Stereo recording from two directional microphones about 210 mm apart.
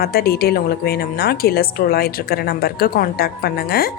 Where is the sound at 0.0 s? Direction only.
45° left (ahead or behind).